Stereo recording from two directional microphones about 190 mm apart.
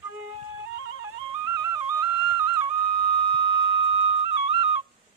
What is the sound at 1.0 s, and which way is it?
Music, 15° right (ahead or behind).